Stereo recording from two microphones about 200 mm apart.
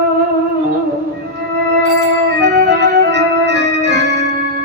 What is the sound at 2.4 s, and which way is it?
Organ, 60° right (ahead or behind).